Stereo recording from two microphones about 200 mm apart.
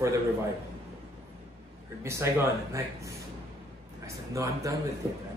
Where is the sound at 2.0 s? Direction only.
15° right (ahead or behind).